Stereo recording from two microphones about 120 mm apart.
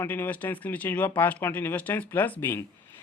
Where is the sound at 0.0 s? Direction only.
15° left (ahead or behind).